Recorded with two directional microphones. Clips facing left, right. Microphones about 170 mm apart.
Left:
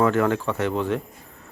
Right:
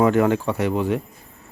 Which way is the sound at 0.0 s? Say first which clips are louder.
Right 3 dB; 15° right (ahead or behind).